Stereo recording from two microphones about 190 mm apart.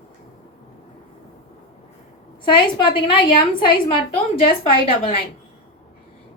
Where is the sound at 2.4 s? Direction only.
25° left (ahead or behind).